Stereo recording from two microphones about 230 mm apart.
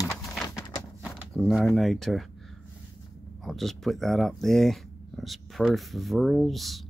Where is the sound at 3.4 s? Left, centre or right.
Centre.